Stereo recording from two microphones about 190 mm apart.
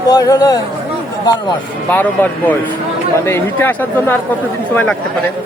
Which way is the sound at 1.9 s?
10° left (ahead or behind).